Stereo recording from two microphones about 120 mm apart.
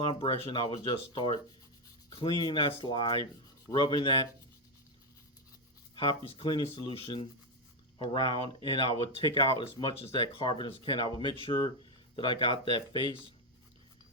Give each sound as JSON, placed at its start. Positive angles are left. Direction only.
{"t": 0.1, "sound": "speech", "side_deg": 45}
{"t": 6.0, "sound": "speech", "side_deg": 45}